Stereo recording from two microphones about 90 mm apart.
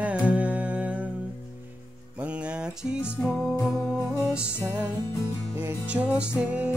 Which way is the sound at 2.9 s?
10° right (ahead or behind).